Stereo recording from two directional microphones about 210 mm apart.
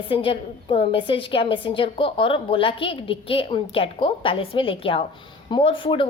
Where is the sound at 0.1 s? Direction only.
25° left (ahead or behind).